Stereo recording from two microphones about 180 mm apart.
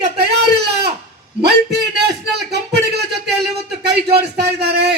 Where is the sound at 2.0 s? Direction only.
65° right (ahead or behind).